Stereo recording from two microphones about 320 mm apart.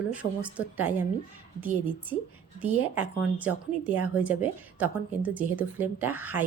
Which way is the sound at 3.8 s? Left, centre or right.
Right.